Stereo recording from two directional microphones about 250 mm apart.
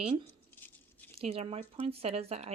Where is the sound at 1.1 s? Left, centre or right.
Right.